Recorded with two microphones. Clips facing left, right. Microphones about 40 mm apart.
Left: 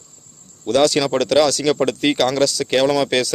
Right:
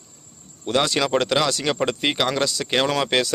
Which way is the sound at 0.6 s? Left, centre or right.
Right.